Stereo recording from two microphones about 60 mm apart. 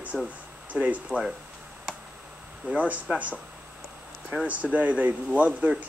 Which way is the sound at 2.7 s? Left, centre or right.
Right.